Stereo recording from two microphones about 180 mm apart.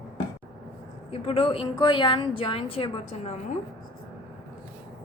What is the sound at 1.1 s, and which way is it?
A woman's voice, 30° left (ahead or behind).